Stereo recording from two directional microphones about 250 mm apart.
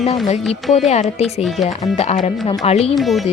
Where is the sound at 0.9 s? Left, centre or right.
Left.